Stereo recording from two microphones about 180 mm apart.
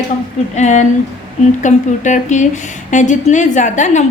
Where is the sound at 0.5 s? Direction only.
40° left (ahead or behind).